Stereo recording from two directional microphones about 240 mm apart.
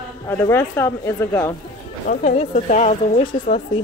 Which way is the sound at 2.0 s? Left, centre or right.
Left.